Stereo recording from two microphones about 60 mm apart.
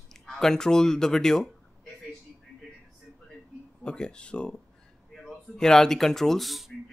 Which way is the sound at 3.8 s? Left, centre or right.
Centre.